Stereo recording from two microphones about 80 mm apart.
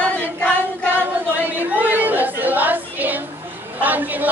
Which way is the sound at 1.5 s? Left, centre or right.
Right.